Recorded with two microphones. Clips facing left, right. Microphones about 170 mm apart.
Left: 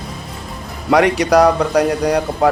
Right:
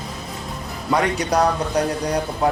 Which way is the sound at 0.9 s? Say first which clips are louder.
Left 7 dB; 80° left.